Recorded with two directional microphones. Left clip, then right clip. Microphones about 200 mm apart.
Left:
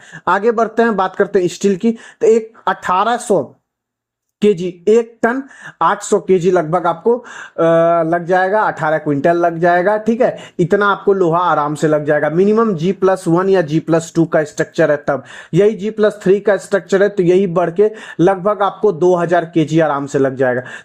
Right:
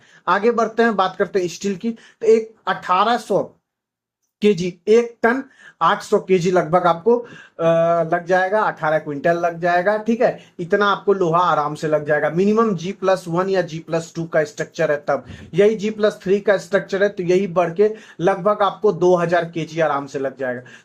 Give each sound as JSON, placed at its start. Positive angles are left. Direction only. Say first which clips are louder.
{"t": 0.3, "sound": "speech", "louder": "left 3 dB", "side_deg": 45}